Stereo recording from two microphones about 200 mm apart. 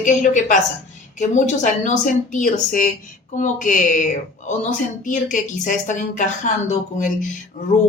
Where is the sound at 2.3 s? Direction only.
40° left (ahead or behind).